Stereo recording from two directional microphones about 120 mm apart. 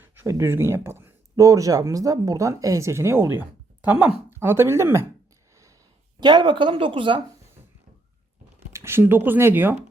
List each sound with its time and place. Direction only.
0.0 s speech: 20° right (ahead or behind)
6.1 s speech: 40° right (ahead or behind)
8.7 s speech: 20° right (ahead or behind)